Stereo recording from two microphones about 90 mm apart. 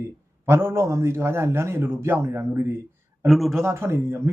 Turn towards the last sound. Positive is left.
turn(degrees=-30)  # may be behind; listen again after turning